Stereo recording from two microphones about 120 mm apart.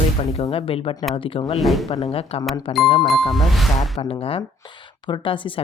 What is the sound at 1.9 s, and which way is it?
Speech, 60° left (ahead or behind).